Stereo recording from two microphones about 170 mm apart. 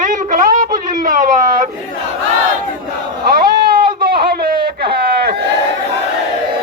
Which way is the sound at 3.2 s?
60° right (ahead or behind).